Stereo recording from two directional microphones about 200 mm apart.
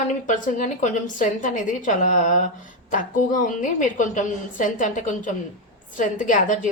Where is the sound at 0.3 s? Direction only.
40° left (ahead or behind).